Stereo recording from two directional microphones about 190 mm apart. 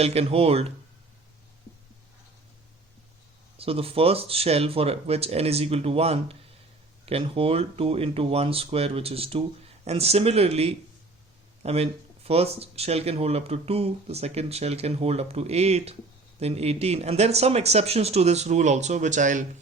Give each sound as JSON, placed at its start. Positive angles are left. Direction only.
{"t": 0.0, "sound": "speech", "side_deg": -30}
{"t": 3.6, "sound": "speech", "side_deg": -30}